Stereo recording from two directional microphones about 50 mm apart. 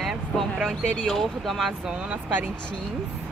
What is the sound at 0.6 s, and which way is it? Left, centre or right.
Speech, centre.